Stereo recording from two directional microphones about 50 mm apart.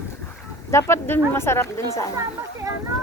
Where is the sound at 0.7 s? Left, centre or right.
Left.